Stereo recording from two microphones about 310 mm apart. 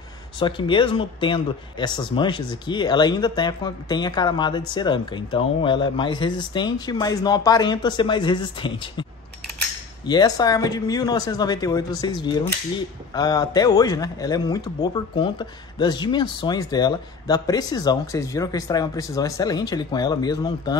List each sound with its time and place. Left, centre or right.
0.4 s a man's voice: centre
10.0 s a man's voice: centre